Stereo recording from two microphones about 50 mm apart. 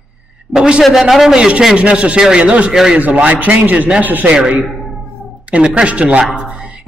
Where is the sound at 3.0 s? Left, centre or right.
Right.